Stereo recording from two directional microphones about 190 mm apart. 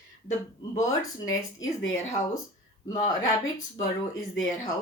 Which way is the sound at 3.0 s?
20° left (ahead or behind).